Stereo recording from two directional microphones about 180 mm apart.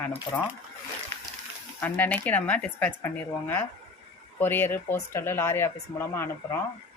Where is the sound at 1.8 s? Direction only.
10° left (ahead or behind).